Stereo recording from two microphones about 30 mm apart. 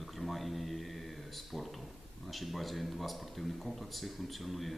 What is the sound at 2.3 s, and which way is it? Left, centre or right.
Speech, centre.